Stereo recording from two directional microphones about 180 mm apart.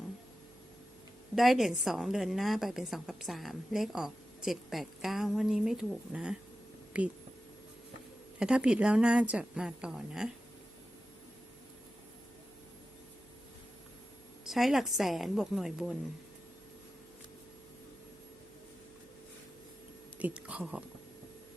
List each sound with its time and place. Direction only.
1.4 s a woman's voice: centre (ahead or behind)
8.4 s a woman's voice: 5° right (ahead or behind)
14.4 s a woman's voice: centre (ahead or behind)
20.1 s speech: 10° right (ahead or behind)